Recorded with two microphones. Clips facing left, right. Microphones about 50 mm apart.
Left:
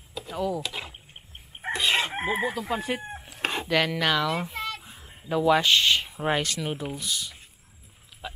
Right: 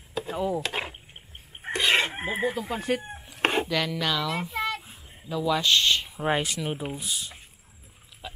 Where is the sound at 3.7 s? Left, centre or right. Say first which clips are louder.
Left 3 dB; centre.